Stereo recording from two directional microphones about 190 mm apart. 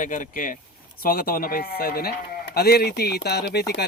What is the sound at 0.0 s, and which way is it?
Speech, 45° left (ahead or behind).